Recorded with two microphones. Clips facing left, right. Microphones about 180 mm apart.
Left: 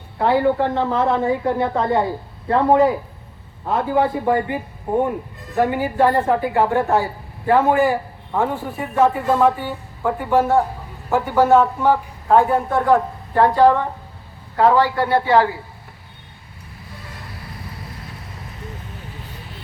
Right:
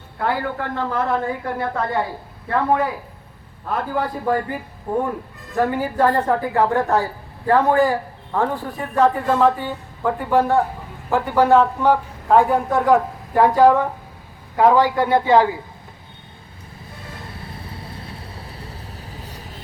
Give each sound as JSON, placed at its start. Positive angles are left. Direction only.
{"t": 0.2, "sound": "a man's voice", "side_deg": 20}
{"t": 17.3, "sound": "vehicle", "side_deg": -25}